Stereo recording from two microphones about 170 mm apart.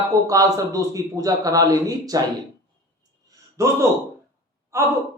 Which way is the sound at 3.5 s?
15° right (ahead or behind).